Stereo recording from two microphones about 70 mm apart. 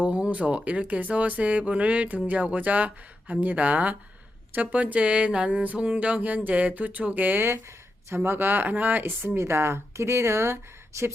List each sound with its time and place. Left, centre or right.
0.0 s speech: centre
9.2 s speech: right